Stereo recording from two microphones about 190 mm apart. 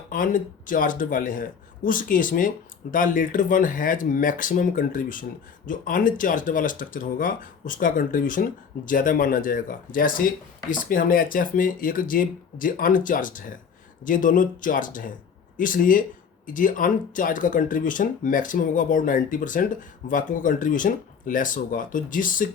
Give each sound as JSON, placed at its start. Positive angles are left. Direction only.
{"t": 0.1, "sound": "speech", "side_deg": 45}